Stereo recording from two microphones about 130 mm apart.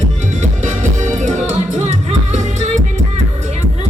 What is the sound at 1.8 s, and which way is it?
Music, 60° right (ahead or behind).